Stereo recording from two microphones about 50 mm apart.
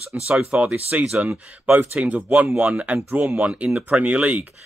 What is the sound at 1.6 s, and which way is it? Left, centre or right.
Speech, right.